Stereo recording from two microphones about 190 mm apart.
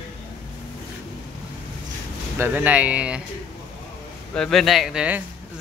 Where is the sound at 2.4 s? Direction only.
10° right (ahead or behind).